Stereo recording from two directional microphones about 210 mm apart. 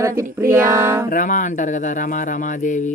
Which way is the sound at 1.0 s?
40° left (ahead or behind).